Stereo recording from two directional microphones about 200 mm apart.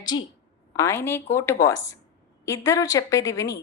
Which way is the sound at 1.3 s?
15° left (ahead or behind).